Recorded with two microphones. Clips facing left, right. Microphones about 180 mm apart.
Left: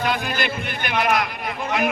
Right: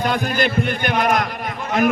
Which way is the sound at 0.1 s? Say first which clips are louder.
Right 4 dB; 45° right (ahead or behind).